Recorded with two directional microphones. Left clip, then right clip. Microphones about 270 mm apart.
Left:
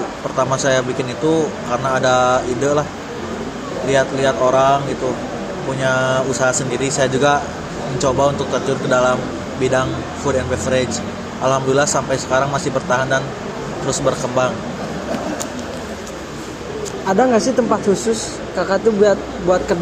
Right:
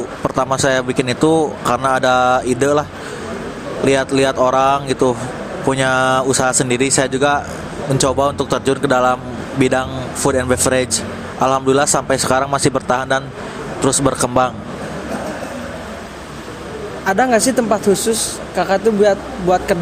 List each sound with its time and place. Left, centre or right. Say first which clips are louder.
0.3 s speech: even; right
3.8 s speech: right 1 dB; right
5.8 s speech: right 1 dB; right
17.1 s speech: right 1 dB; right